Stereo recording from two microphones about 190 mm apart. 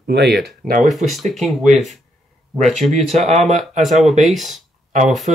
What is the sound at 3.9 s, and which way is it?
Speech, centre (ahead or behind).